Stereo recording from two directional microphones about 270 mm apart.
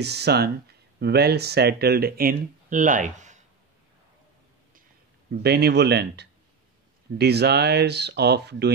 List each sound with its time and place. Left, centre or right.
0.0 s speech: right
5.3 s speech: right